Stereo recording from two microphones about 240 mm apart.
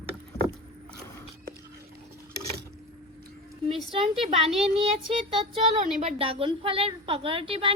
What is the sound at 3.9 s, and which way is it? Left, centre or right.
A woman's voice, right.